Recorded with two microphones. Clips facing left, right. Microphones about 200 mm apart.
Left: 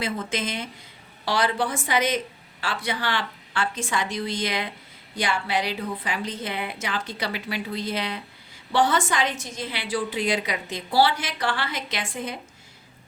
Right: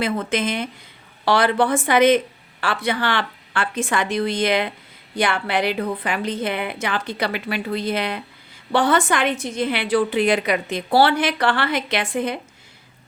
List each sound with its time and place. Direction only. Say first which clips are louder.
0.0 s a woman's voice: right 6 dB; 60° right (ahead or behind)